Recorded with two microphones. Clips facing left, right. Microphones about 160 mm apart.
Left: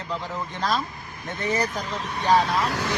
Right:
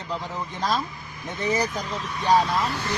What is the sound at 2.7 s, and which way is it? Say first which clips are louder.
Speech: left 2 dB; 90° left.